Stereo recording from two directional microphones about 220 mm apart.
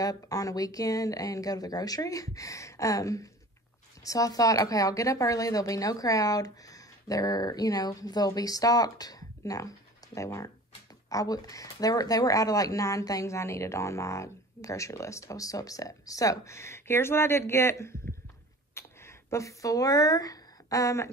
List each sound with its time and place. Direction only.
0.0 s speech: 15° left (ahead or behind)